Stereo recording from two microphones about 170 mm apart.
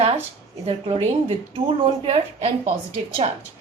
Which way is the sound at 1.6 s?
35° right (ahead or behind).